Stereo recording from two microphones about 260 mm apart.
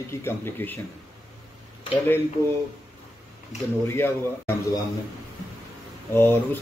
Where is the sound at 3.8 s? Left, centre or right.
Centre.